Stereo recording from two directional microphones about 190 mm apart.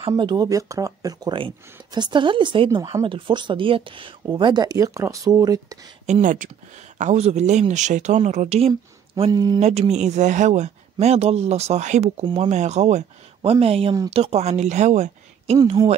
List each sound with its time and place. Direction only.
0.1 s speech: 20° right (ahead or behind)
6.0 s speech: 40° right (ahead or behind)
9.2 s speech: 20° right (ahead or behind)
9.6 s speech: 35° right (ahead or behind)